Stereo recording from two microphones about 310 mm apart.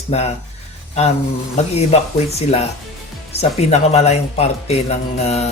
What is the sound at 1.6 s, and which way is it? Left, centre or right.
Speech, left.